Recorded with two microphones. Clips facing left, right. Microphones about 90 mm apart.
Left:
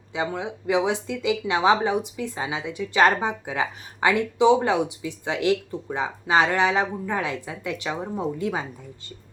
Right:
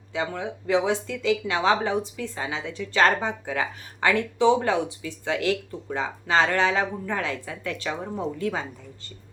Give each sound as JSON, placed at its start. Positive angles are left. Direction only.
{"t": 0.1, "sound": "speech", "side_deg": 20}